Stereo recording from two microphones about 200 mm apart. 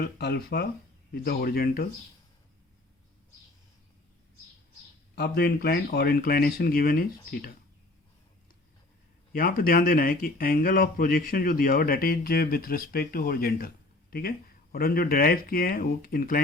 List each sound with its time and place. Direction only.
0.0 s speech: 55° left (ahead or behind)
5.1 s speech: 55° left (ahead or behind)
9.3 s speech: 45° left (ahead or behind)